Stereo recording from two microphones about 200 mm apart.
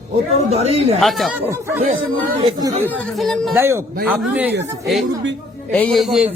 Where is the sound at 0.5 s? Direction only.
30° right (ahead or behind).